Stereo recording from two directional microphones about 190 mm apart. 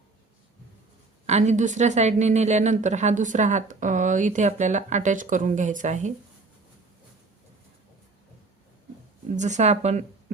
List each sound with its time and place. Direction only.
1.3 s a woman's voice: 35° right (ahead or behind)
9.3 s speech: 40° right (ahead or behind)